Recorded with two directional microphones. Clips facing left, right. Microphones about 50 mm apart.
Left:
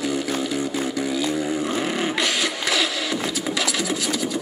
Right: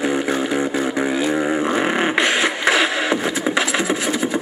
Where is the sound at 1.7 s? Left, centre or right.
Right.